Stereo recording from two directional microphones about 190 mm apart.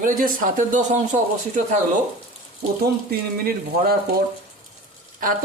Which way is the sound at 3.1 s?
55° right (ahead or behind).